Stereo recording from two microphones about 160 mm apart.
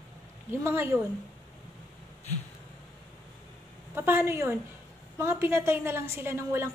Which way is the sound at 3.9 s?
15° right (ahead or behind).